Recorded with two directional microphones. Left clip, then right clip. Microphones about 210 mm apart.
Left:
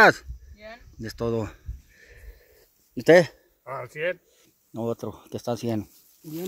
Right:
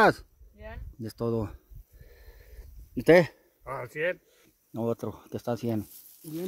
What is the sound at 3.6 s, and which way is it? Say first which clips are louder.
Speech: left 1 dB; 5° right (ahead or behind).